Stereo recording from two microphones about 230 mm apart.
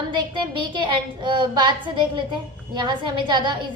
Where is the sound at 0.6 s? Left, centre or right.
Right.